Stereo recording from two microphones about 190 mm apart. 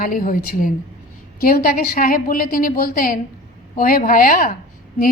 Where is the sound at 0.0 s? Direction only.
45° left (ahead or behind).